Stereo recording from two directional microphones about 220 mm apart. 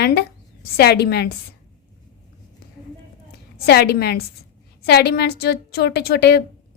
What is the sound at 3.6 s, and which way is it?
A woman's voice, 45° left (ahead or behind).